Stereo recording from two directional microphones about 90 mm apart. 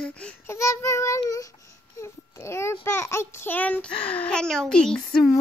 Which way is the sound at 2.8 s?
30° left (ahead or behind).